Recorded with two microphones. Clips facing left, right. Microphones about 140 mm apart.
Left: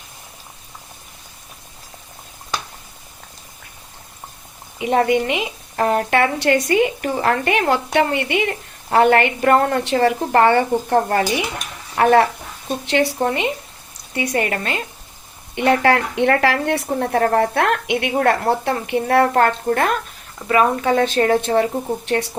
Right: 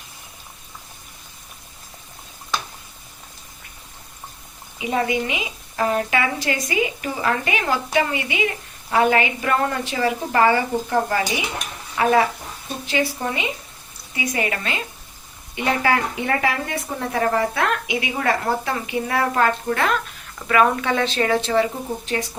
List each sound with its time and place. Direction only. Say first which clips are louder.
4.8 s a woman's voice: left 5 dB; 60° left (ahead or behind)
14.1 s a woman's voice: left 4 dB; 55° left (ahead or behind)
15.5 s speech: left 5 dB; 60° left (ahead or behind)
17.0 s a woman's voice: left 3 dB; 55° left (ahead or behind)
20.5 s a woman's voice: left 2 dB; 35° left (ahead or behind)
22.0 s speech: left 4 dB; 70° left (ahead or behind)